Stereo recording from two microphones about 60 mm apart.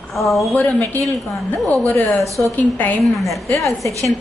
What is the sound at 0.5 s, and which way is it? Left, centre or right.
Speech, left.